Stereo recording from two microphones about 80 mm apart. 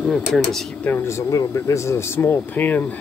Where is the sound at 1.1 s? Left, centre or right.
Left.